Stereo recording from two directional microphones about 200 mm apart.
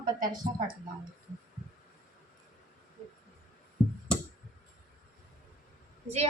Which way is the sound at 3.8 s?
5° right (ahead or behind).